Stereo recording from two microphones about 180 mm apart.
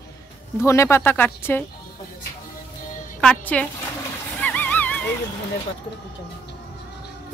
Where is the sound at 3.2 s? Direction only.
5° left (ahead or behind).